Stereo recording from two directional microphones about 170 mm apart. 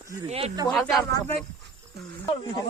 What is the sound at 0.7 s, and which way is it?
Speech, centre (ahead or behind).